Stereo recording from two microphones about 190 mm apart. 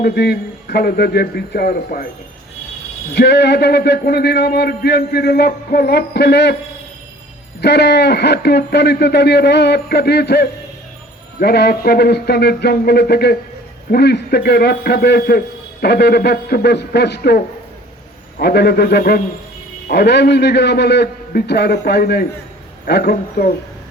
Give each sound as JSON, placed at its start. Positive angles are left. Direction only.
{"t": 0.0, "sound": "a man's voice", "side_deg": 55}
{"t": 3.2, "sound": "a man's voice", "side_deg": 60}
{"t": 7.6, "sound": "a man's voice", "side_deg": 60}